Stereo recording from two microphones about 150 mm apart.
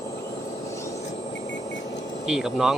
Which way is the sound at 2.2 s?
5° right (ahead or behind).